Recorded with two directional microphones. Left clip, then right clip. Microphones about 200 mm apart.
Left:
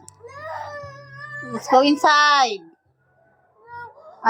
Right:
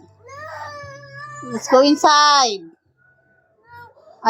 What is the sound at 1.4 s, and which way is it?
A woman's voice, 20° right (ahead or behind).